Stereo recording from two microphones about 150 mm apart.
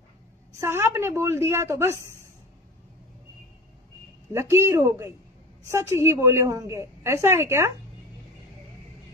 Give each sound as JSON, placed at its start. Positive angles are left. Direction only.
{"t": 0.6, "sound": "a woman's voice", "side_deg": -15}
{"t": 4.3, "sound": "a woman's voice", "side_deg": -15}